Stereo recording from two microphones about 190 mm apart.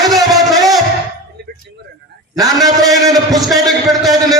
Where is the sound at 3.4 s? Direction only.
Centre (ahead or behind).